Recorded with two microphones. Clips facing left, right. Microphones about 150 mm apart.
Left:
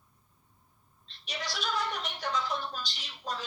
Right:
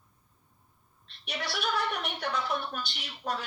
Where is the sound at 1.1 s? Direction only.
60° right (ahead or behind).